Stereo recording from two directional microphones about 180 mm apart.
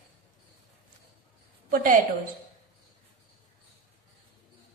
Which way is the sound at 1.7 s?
50° right (ahead or behind).